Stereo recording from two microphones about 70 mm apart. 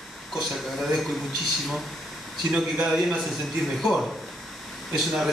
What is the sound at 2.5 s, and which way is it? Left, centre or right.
Speech, centre.